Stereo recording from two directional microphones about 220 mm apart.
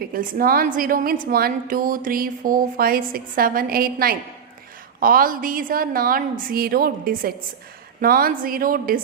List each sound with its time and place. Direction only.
0.1 s a woman's voice: 40° right (ahead or behind)